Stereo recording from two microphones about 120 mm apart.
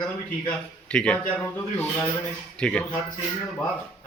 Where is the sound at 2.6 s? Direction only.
10° left (ahead or behind).